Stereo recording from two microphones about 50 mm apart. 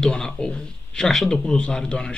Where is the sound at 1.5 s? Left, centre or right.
Centre.